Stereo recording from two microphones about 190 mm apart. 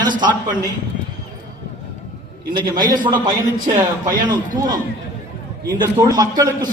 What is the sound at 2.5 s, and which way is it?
A man's voice, 20° right (ahead or behind).